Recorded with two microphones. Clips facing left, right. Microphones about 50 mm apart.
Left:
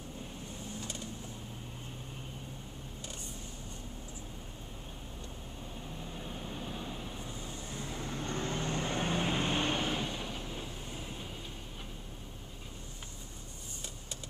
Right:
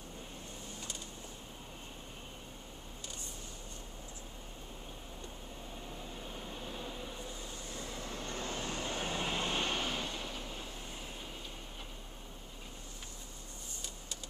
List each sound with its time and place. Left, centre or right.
7.9 s vehicle: left
8.2 s vehicle: left; by 10.4 s centre